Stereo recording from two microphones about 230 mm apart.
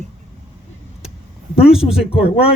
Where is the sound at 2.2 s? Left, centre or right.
Left.